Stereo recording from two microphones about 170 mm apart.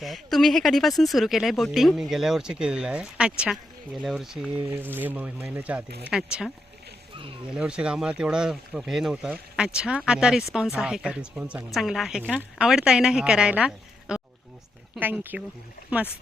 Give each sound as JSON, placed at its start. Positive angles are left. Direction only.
{"t": 0.0, "sound": "speech", "side_deg": 0}
{"t": 7.2, "sound": "speech", "side_deg": -30}
{"t": 7.5, "sound": "speech", "side_deg": -5}